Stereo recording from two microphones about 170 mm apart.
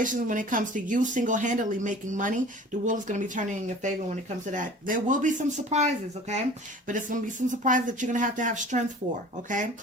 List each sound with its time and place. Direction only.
0.0 s speech: 50° right (ahead or behind)